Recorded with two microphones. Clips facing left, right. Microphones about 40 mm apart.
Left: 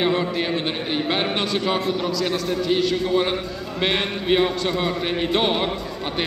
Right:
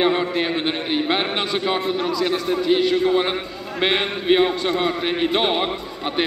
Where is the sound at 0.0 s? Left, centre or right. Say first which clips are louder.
Right 2 dB; centre.